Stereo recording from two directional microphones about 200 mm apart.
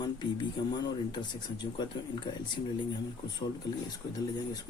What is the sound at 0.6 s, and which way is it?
Speech, 20° left (ahead or behind).